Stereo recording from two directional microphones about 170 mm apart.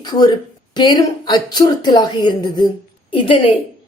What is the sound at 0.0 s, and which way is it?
A woman's voice, 25° left (ahead or behind).